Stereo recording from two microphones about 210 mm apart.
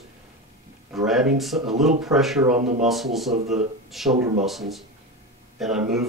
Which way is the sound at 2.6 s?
35° right (ahead or behind).